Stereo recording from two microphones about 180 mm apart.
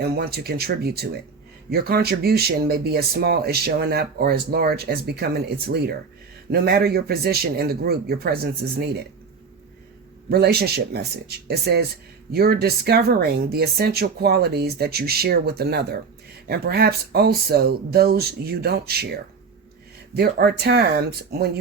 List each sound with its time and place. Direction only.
0.0 s speech: 60° right (ahead or behind)
10.2 s speech: 60° right (ahead or behind)